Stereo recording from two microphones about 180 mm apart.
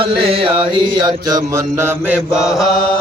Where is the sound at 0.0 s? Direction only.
30° right (ahead or behind).